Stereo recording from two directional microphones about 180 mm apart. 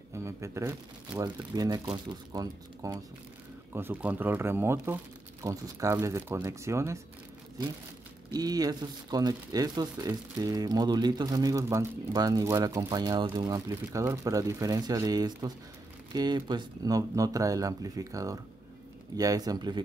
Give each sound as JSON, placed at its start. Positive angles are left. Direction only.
{"t": 0.1, "sound": "speech", "side_deg": -15}
{"t": 3.7, "sound": "speech", "side_deg": -10}
{"t": 8.3, "sound": "speech", "side_deg": -20}